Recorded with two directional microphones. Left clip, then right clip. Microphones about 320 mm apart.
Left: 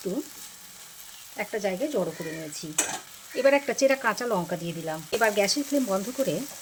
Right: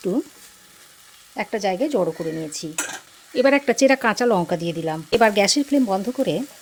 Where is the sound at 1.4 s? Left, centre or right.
Right.